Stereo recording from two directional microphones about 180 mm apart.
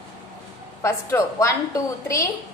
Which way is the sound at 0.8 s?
15° left (ahead or behind).